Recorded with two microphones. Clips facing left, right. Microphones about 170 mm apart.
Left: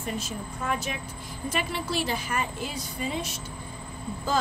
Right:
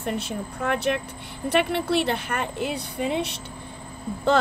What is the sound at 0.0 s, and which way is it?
Speech, 60° right (ahead or behind).